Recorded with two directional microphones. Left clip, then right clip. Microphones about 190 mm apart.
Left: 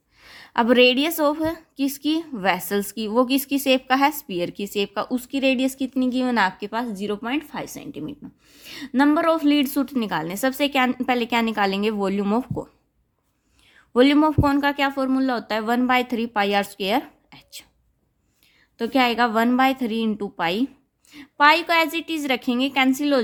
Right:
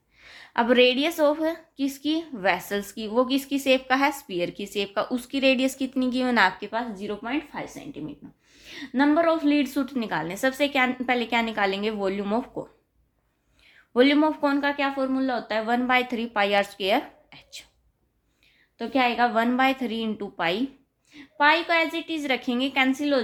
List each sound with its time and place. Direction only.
0.2 s a woman's voice: 40° left (ahead or behind)
6.7 s speech: 50° left (ahead or behind)
13.7 s a woman's voice: 40° left (ahead or behind)
18.8 s a woman's voice: 50° left (ahead or behind)